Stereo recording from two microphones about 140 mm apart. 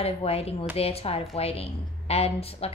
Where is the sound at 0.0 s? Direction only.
45° left (ahead or behind).